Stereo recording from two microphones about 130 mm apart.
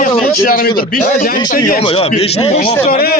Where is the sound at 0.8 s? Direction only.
90° left.